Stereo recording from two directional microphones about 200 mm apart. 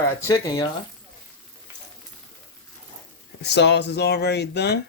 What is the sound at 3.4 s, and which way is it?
Speech, 60° left (ahead or behind).